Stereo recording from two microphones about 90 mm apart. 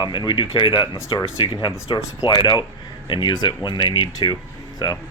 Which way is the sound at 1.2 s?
80° left.